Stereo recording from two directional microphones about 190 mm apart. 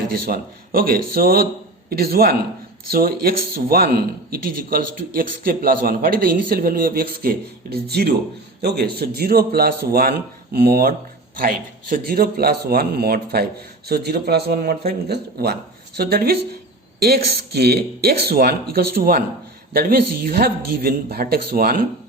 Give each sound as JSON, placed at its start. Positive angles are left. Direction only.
{"t": 0.1, "sound": "speech", "side_deg": -50}